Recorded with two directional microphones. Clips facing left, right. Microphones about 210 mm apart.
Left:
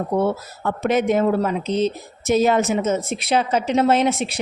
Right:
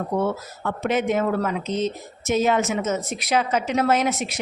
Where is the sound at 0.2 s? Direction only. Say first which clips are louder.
Left 3 dB; 35° left (ahead or behind).